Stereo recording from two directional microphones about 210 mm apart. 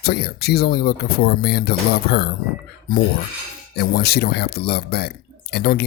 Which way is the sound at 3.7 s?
50° left (ahead or behind).